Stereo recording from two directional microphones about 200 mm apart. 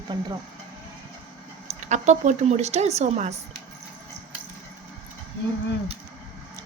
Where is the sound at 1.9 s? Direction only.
35° right (ahead or behind).